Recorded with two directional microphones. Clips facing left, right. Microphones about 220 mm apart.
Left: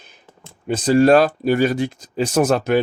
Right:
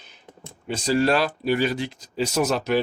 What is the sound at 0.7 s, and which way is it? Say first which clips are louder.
Speech: left 8 dB; 50° left (ahead or behind).